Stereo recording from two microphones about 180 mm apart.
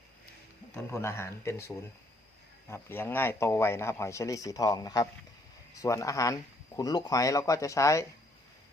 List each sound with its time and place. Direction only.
0.7 s a man's voice: 15° left (ahead or behind)